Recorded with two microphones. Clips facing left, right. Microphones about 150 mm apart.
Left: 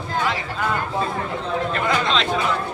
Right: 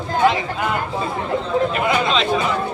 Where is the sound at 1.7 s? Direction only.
5° right (ahead or behind).